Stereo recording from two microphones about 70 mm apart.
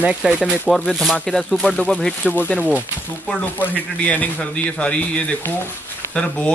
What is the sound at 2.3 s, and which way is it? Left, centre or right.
Speech, left.